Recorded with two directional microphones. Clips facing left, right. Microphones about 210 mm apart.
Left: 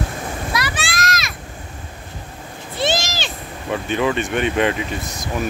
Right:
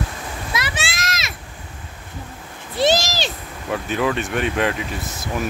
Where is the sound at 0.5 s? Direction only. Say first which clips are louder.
Even; 25° right (ahead or behind).